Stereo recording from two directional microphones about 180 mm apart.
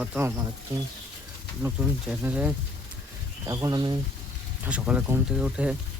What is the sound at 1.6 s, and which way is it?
Speech, 10° right (ahead or behind).